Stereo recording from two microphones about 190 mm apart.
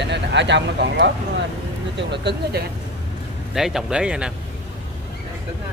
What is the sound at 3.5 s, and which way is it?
Speech, centre (ahead or behind).